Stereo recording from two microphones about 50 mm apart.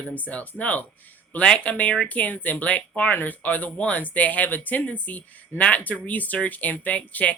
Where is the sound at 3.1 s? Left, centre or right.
Left.